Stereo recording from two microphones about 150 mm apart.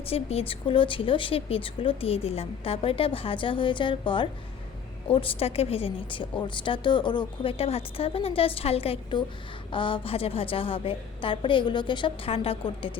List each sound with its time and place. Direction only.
0.1 s a woman's voice: 40° left (ahead or behind)